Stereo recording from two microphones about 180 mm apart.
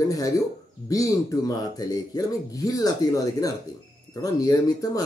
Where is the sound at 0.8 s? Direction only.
20° left (ahead or behind).